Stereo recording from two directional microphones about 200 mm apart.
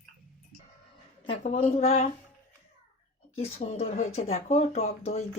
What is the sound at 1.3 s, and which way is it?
Speech, 30° left (ahead or behind).